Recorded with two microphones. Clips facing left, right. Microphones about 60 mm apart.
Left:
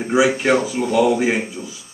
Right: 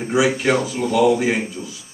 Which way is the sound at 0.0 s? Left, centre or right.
Centre.